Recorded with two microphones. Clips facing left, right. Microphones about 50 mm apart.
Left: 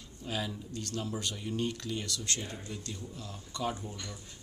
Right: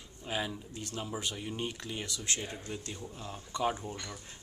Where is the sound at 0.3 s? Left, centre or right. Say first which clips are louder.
Right 1 dB; centre.